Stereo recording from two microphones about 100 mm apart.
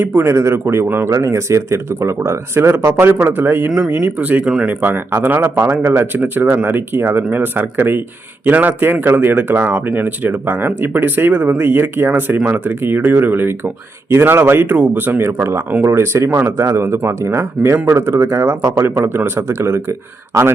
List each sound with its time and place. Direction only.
0.0 s speech: 20° right (ahead or behind)
3.7 s speech: 10° right (ahead or behind)
4.8 s speech: 20° right (ahead or behind)